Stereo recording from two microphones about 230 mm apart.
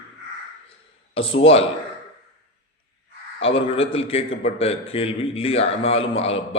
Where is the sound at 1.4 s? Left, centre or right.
Left.